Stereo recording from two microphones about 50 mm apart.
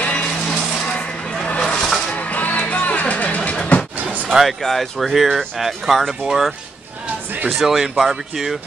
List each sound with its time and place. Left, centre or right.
0.0 s music: left
1.6 s vehicle: centre
2.0 s music: left
4.0 s slam: right
4.3 s speech: centre